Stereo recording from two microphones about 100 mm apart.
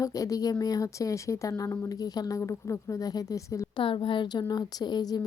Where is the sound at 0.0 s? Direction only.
35° left (ahead or behind).